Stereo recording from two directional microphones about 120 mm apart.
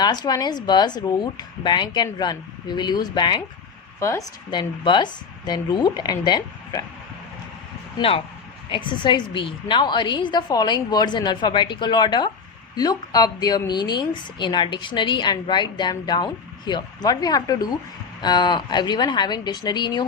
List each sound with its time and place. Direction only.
0.0 s a woman's voice: 35° left (ahead or behind)
4.5 s a woman's voice: 40° left (ahead or behind)
8.7 s a woman's voice: 40° left (ahead or behind)